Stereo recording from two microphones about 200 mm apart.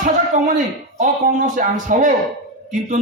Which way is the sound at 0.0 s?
40° right (ahead or behind).